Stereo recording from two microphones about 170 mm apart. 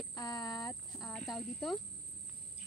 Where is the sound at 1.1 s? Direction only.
Centre (ahead or behind).